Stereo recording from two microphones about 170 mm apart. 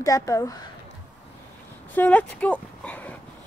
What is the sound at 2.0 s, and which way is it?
Speech, 10° left (ahead or behind).